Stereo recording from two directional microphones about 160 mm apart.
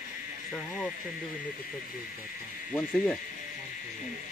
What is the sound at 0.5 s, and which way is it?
Insect, centre (ahead or behind).